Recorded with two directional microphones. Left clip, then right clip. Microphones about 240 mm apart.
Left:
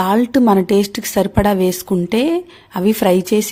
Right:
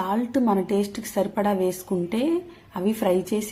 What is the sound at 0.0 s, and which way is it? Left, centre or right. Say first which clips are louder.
A woman's voice: left 10 dB; left.